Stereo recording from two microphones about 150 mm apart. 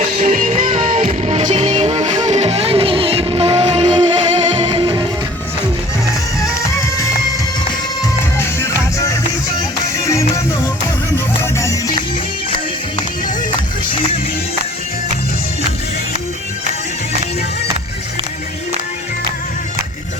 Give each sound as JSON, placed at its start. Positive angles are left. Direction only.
{"t": 0.3, "sound": "music", "side_deg": -55}
{"t": 10.1, "sound": "music", "side_deg": 20}